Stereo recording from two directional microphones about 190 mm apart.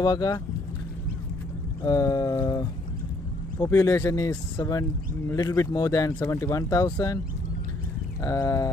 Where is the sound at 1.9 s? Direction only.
20° left (ahead or behind).